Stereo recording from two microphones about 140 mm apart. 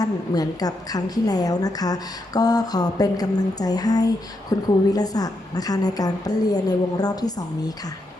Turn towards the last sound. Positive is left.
turn(degrees=25)  # may be behind; listen again after turning